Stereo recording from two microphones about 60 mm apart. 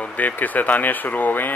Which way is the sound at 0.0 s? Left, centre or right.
Left.